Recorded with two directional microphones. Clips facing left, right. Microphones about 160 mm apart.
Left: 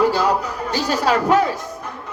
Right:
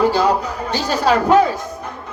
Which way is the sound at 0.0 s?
30° right (ahead or behind).